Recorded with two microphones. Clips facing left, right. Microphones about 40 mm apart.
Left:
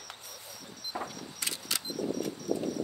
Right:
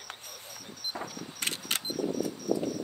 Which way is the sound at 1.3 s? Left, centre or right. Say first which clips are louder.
Right 3 dB; right.